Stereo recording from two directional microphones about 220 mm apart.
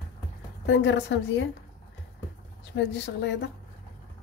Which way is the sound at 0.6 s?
55° left (ahead or behind).